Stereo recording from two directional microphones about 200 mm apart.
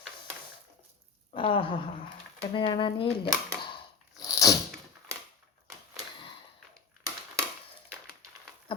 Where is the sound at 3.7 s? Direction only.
15° left (ahead or behind).